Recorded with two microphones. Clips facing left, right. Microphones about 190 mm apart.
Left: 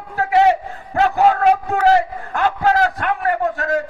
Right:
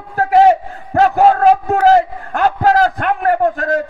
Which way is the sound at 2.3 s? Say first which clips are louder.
Right 4 dB; 45° right (ahead or behind).